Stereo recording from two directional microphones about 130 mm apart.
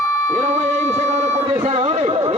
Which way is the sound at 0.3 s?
70° right (ahead or behind).